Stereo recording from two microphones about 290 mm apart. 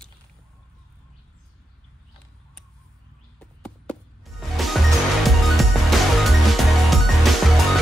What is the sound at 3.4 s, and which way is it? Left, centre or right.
Music, centre.